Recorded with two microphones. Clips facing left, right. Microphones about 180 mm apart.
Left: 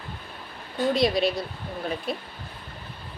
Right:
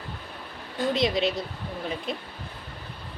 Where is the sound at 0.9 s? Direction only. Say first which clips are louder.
Left 2 dB; 20° right (ahead or behind).